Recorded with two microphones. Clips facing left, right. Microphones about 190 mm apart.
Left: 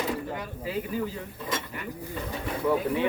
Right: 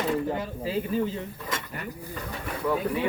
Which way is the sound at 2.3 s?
10° left (ahead or behind).